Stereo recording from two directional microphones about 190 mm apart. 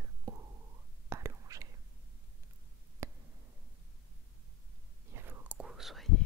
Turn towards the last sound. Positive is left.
turn(degrees=0)  # may be behind; listen again after turning